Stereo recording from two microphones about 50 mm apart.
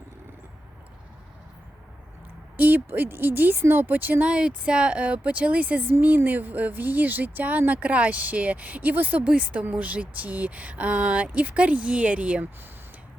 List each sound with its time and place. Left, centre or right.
2.6 s speech: right
4.3 s speech: right